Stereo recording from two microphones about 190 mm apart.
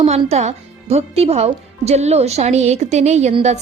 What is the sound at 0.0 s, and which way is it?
Speech, 35° right (ahead or behind).